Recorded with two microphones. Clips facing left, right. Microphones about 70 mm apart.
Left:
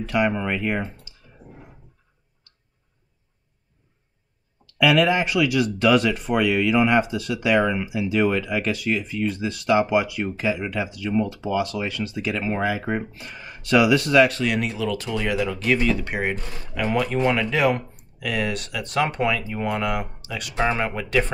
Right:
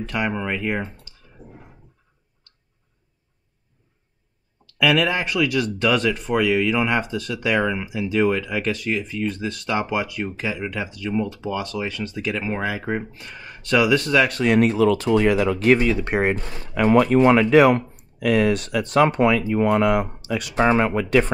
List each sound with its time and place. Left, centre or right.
0.0 s speech: centre
4.6 s speech: centre
14.6 s speech: right
15.8 s speech: centre
16.1 s speech: right
17.3 s speech: right
18.2 s speech: right
20.5 s speech: right